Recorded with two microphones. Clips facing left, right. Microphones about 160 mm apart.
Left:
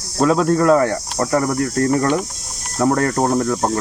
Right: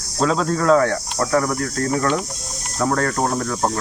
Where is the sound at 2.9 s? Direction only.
25° left (ahead or behind).